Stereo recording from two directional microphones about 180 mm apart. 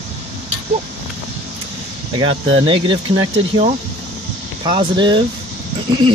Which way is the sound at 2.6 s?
30° right (ahead or behind).